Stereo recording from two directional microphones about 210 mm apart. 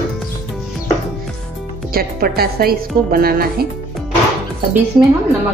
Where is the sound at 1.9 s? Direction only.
45° right (ahead or behind).